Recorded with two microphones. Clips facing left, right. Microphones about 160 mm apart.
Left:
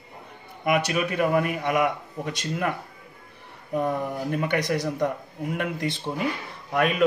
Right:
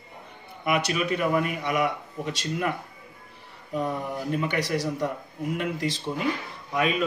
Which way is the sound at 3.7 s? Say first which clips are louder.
Left 3 dB; 55° left (ahead or behind).